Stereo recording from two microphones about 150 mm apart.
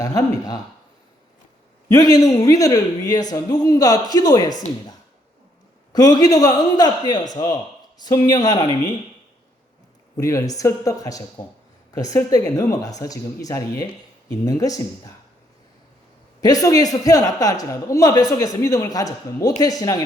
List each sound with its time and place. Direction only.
0.0 s a man's voice: 25° left (ahead or behind)
1.9 s a man's voice: 25° left (ahead or behind)
5.9 s a man's voice: 25° left (ahead or behind)
10.2 s a man's voice: 20° left (ahead or behind)
16.4 s a man's voice: 25° left (ahead or behind)